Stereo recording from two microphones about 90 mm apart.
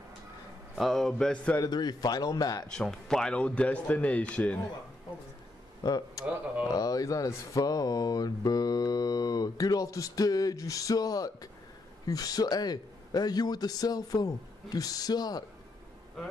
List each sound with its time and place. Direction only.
0.7 s a man's voice: 5° left (ahead or behind)
1.6 s speech: 50° left (ahead or behind)
2.7 s a man's voice: 10° left (ahead or behind)
5.9 s speech: 50° left (ahead or behind)